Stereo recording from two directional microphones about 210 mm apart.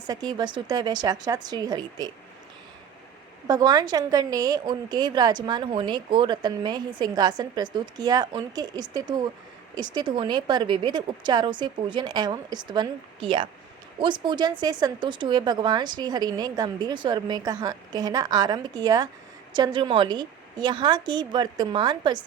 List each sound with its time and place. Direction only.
0.1 s a woman's voice: 20° right (ahead or behind)
3.4 s a woman's voice: 20° right (ahead or behind)